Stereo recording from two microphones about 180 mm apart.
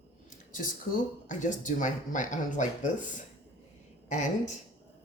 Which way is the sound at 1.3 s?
45° left (ahead or behind).